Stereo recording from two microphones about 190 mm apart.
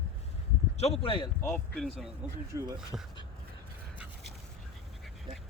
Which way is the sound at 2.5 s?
15° right (ahead or behind).